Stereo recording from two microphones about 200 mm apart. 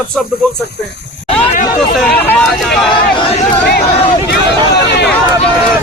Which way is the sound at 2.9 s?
30° left (ahead or behind).